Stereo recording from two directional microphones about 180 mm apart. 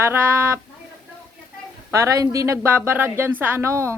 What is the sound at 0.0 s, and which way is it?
Speech, 15° right (ahead or behind).